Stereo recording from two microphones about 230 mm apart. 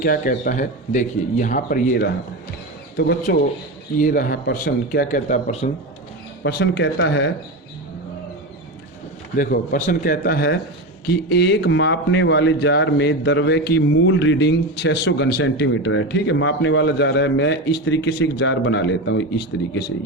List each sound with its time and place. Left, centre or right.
0.0 s speech: left
6.4 s speech: left
9.4 s speech: left